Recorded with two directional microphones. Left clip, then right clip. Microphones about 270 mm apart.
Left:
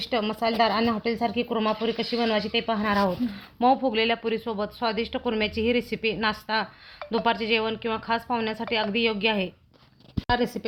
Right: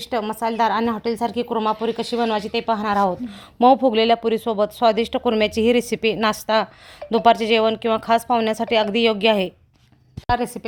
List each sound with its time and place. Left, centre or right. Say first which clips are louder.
0.0 s a woman's voice: right 3 dB; right
10.2 s a woman's voice: right 4 dB; right